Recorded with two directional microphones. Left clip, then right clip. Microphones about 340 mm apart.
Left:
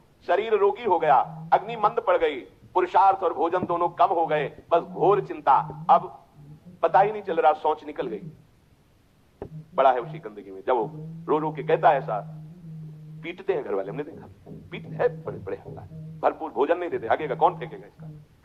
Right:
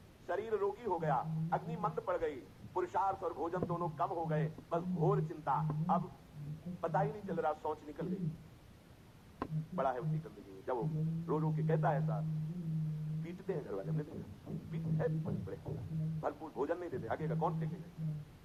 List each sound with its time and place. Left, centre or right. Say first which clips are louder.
0.3 s speech: left 15 dB; left
9.7 s speech: left 16 dB; left
13.2 s speech: left 15 dB; left